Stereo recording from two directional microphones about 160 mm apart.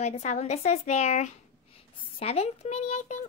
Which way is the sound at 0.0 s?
45° left (ahead or behind).